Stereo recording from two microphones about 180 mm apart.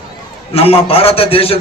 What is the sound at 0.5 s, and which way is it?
A man's voice, 30° left (ahead or behind).